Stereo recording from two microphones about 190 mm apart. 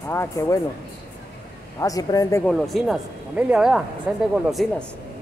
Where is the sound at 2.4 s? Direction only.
Centre (ahead or behind).